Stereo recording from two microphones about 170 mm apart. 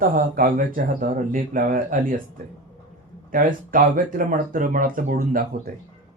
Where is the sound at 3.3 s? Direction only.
55° right (ahead or behind).